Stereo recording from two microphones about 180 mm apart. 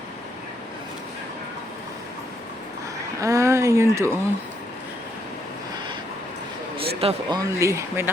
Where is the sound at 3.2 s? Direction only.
15° right (ahead or behind).